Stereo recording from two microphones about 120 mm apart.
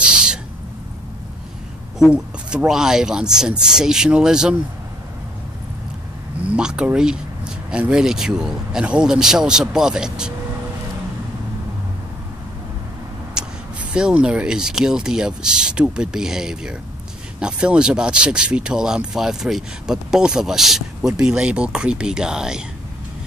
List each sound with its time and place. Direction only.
0.0 s owl: 5° right (ahead or behind)
2.0 s speech: 5° right (ahead or behind)
6.4 s speech: 10° right (ahead or behind)
13.4 s vehicle: 5° right (ahead or behind)
13.9 s speech: 5° right (ahead or behind)